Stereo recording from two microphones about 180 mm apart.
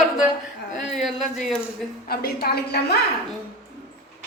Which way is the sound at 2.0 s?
60° left (ahead or behind).